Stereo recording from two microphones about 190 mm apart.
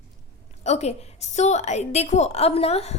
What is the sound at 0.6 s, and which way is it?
A woman's voice, 35° left (ahead or behind).